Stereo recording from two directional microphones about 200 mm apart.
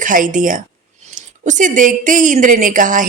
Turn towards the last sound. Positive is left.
turn(degrees=-40)  # may be behind; listen again after turning